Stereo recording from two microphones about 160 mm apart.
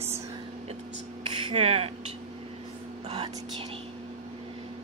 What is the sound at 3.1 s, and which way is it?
Speech, 35° right (ahead or behind).